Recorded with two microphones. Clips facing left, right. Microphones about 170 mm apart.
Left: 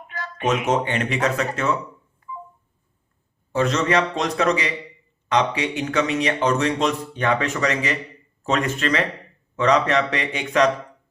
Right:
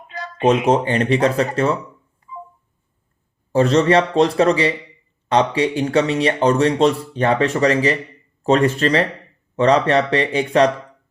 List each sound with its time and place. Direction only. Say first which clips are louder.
0.3 s speech: right 6 dB; 30° right (ahead or behind)
3.5 s speech: right 6 dB; 30° right (ahead or behind)